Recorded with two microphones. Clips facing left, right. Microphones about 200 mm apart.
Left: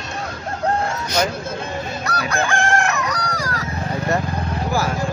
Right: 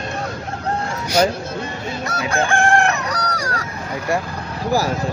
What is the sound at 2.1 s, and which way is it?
Chicken, 25° right (ahead or behind).